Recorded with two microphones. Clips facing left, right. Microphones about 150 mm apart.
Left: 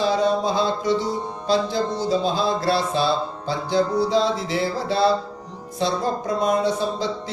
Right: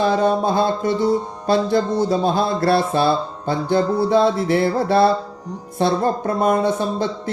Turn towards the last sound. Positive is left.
turn(degrees=-55)  # may be behind; listen again after turning